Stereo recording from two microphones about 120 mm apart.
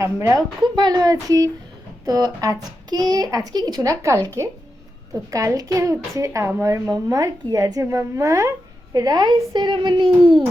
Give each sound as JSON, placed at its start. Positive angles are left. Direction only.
{"t": 0.0, "sound": "a woman's voice", "side_deg": -25}
{"t": 5.3, "sound": "a woman's voice", "side_deg": -30}